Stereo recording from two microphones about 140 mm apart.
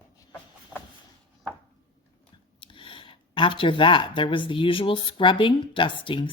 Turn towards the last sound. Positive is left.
turn(degrees=35)  # may be behind; listen again after turning